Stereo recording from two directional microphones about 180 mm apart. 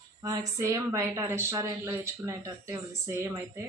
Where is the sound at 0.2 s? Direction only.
20° right (ahead or behind).